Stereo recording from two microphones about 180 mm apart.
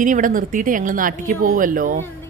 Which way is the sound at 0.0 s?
45° right (ahead or behind).